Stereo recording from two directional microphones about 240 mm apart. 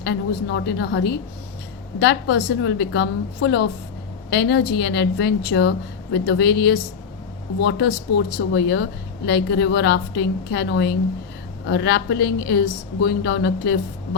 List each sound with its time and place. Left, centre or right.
0.0 s a woman's voice: left